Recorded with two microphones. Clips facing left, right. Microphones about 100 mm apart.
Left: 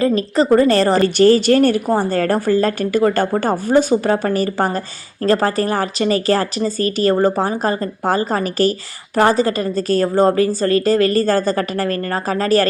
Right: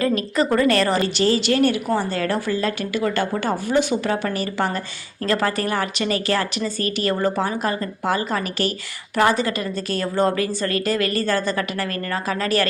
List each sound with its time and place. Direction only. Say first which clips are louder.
0.0 s a woman's voice: left 5 dB; 30° left (ahead or behind)
1.0 s a woman's voice: left 8 dB; 45° left (ahead or behind)